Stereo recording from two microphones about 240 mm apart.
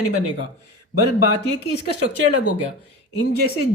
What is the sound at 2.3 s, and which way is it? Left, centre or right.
Speech, left.